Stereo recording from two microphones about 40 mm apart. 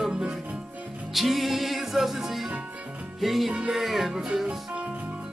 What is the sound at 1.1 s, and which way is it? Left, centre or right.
Music, centre.